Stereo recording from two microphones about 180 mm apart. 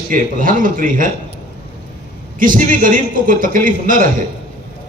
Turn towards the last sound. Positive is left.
turn(degrees=-50)  # may be behind; listen again after turning